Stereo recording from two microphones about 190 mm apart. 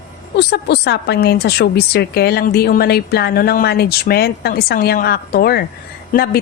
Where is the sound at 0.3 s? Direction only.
60° left (ahead or behind).